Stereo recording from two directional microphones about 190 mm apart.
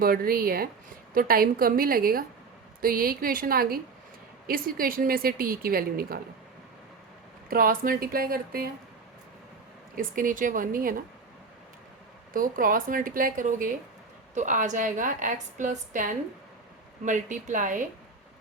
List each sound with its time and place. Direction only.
0.0 s a woman's voice: 50° right (ahead or behind)
7.5 s a woman's voice: 50° right (ahead or behind)
9.9 s a woman's voice: 45° right (ahead or behind)
12.3 s a woman's voice: 45° right (ahead or behind)